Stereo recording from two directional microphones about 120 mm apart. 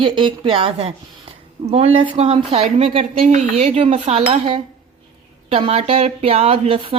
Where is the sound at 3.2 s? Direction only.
70° right (ahead or behind).